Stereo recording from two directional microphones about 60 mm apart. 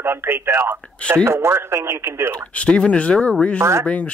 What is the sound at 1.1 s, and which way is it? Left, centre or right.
Speech, right.